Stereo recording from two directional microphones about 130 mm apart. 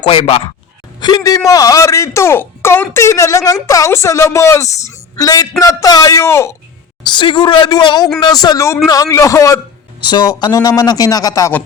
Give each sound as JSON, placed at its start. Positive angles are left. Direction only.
{"t": 0.0, "sound": "speech", "side_deg": 45}
{"t": 0.9, "sound": "a man's voice", "side_deg": 35}
{"t": 7.1, "sound": "a man's voice", "side_deg": 35}